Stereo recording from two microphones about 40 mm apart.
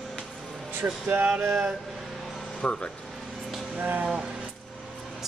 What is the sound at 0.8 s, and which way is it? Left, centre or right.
Speech, right.